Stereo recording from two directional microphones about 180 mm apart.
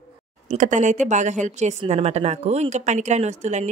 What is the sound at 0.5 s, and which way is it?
Speech, 45° right (ahead or behind).